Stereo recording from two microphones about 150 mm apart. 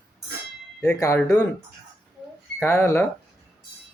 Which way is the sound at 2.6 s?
15° left (ahead or behind).